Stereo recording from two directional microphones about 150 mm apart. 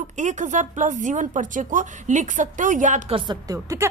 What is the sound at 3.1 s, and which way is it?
Speech, 30° right (ahead or behind).